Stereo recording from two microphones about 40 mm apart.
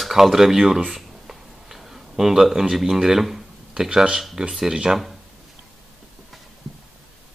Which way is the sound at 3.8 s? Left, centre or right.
Centre.